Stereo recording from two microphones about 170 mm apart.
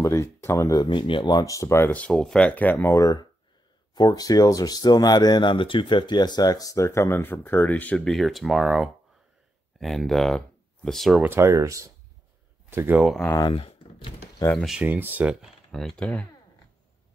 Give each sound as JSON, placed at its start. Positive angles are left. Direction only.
{"t": 0.0, "sound": "speech", "side_deg": 20}
{"t": 11.2, "sound": "speech", "side_deg": -15}
{"t": 13.0, "sound": "speech", "side_deg": 0}
{"t": 13.3, "sound": "a sound", "side_deg": 25}
{"t": 14.6, "sound": "speech", "side_deg": -5}